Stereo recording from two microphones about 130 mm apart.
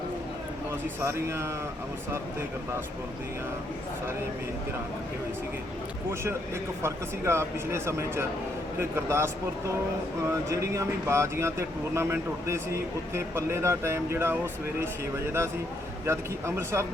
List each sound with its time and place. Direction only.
1.0 s speech: 20° right (ahead or behind)
6.8 s speech: 20° right (ahead or behind)
16.0 s speech: 20° right (ahead or behind)